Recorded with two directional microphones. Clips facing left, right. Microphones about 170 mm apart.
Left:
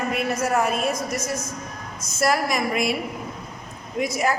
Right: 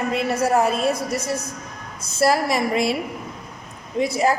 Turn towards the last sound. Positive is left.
turn(degrees=-30)  # may be behind; listen again after turning